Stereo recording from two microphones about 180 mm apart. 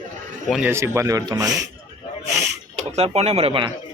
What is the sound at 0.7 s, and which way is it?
Speech, 15° right (ahead or behind).